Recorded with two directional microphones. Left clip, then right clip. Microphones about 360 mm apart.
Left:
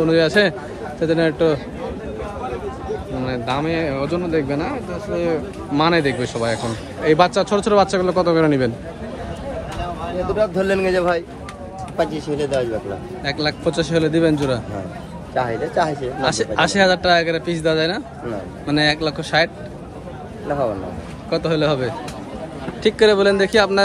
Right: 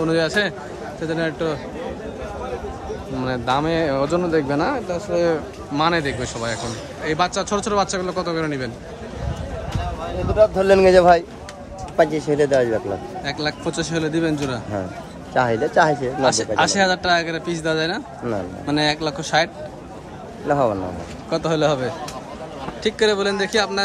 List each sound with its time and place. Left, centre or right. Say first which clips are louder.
0.0 s speech: left 4 dB; centre
3.3 s speech: right 2 dB; centre
10.0 s speech: right 4 dB; centre
13.2 s speech: left 6 dB; centre
15.3 s speech: right 3 dB; right
16.2 s speech: left 1 dB; centre
21.3 s speech: left 1 dB; centre